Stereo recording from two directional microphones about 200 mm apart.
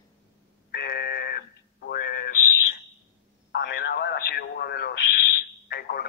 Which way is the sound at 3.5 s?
50° left (ahead or behind).